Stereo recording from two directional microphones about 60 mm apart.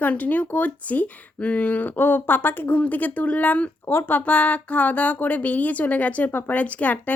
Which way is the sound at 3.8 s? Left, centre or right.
Left.